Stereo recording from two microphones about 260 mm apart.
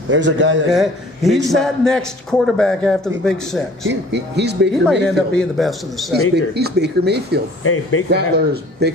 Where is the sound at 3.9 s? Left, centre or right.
Right.